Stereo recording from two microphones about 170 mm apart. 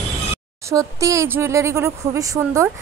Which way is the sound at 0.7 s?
20° right (ahead or behind).